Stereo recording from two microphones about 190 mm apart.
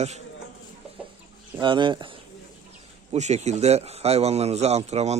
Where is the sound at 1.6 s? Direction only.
25° right (ahead or behind).